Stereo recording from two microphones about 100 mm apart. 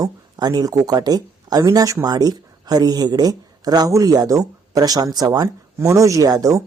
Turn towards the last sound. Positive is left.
turn(degrees=-40)  # may be behind; listen again after turning